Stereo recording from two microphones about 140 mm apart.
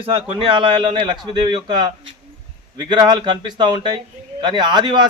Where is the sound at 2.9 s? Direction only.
35° right (ahead or behind).